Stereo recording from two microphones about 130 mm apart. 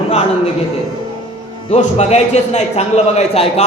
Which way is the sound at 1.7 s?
60° left (ahead or behind).